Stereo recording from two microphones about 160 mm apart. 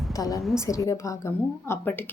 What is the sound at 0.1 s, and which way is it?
A woman's voice, 20° left (ahead or behind).